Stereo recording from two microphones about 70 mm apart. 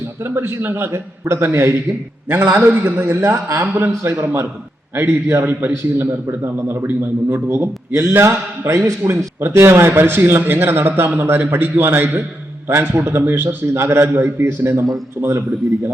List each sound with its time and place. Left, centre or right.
0.3 s speech: right
4.0 s speech: right